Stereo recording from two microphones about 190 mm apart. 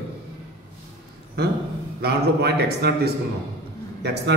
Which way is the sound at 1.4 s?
55° right (ahead or behind).